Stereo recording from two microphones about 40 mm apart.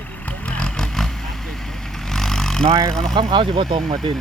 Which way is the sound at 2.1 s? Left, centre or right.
Centre.